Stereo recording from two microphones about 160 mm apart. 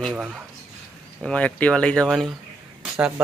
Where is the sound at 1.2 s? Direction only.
10° left (ahead or behind).